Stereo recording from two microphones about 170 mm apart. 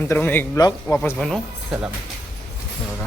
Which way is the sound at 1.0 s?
5° left (ahead or behind).